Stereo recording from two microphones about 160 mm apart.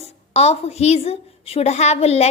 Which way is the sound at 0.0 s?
40° left (ahead or behind).